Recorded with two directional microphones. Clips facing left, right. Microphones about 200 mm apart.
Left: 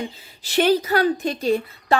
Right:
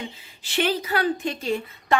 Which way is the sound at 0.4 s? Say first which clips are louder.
Left 6 dB; 40° left (ahead or behind).